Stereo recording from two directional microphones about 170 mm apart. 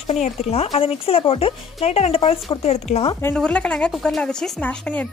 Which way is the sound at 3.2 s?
5° left (ahead or behind).